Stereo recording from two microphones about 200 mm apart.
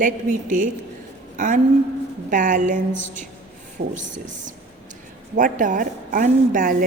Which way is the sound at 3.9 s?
40° right (ahead or behind).